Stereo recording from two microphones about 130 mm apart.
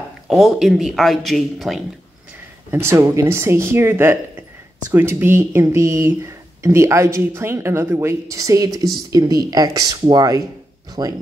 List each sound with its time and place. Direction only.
0.3 s speech: centre (ahead or behind)
2.7 s speech: 20° right (ahead or behind)